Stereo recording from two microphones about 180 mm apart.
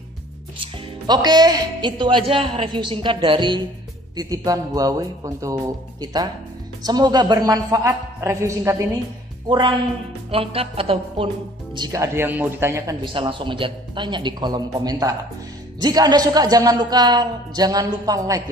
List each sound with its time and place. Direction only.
0.6 s a woman's voice: 25° right (ahead or behind)
11.7 s speech: 20° right (ahead or behind)
13.0 s speech: 25° right (ahead or behind)